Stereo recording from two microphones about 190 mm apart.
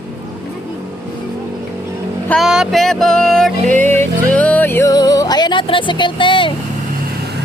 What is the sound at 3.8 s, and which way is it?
Speech, 10° left (ahead or behind).